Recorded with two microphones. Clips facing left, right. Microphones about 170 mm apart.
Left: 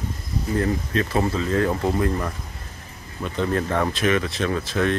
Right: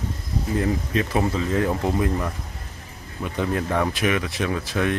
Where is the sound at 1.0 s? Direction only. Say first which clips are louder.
Left 1 dB; 15° right (ahead or behind).